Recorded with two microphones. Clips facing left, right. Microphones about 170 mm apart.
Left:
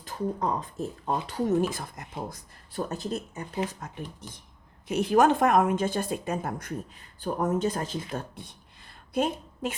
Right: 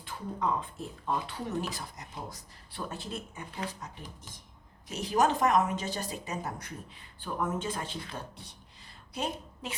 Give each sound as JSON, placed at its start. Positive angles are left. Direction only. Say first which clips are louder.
{"t": 0.0, "sound": "speech", "louder": "left 4 dB", "side_deg": 40}
{"t": 7.2, "sound": "a woman's voice", "louder": "left 7 dB", "side_deg": 40}